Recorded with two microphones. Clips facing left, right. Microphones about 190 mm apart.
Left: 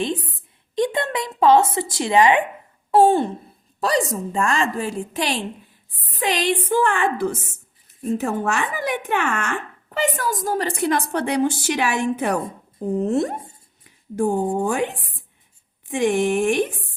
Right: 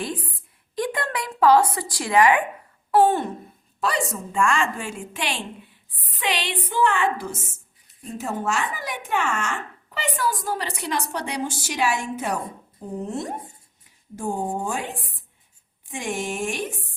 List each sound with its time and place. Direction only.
0.0 s a sound: 25° left (ahead or behind)
0.8 s a woman's voice: 25° left (ahead or behind); by 12.4 s 60° left (ahead or behind)
13.0 s speech: 75° left (ahead or behind)
14.2 s speech: 65° left (ahead or behind)
15.9 s speech: 60° left (ahead or behind)